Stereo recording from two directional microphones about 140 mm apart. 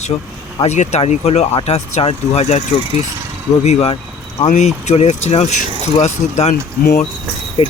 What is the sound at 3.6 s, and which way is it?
Speech, 50° left (ahead or behind).